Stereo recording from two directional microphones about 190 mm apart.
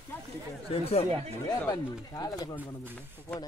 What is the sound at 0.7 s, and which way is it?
Speech, 30° left (ahead or behind).